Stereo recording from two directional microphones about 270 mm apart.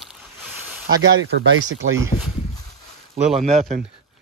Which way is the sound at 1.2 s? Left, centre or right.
Right.